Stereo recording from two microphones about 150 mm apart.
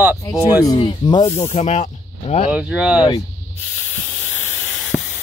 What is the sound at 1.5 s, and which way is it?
Speech, 50° left (ahead or behind).